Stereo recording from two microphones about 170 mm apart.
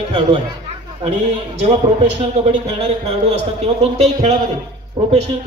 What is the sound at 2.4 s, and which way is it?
A man's voice, 40° right (ahead or behind).